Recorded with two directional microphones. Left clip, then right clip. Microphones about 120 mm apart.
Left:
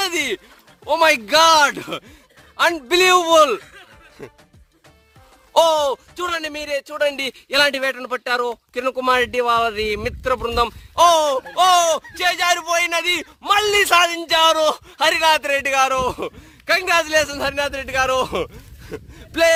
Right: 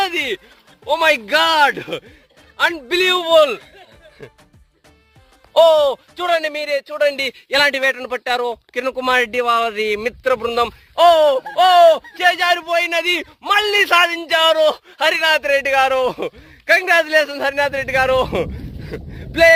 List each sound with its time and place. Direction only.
0.0 s a sound: 60° left (ahead or behind)
0.9 s a man's voice: 55° left (ahead or behind)
2.6 s speech: 65° left (ahead or behind)
4.2 s music: 90° left
5.7 s speech: 30° left (ahead or behind)
6.1 s a man's voice: 20° left (ahead or behind)
17.7 s a man's voice: 15° left (ahead or behind)
18.9 s a sound: 25° left (ahead or behind)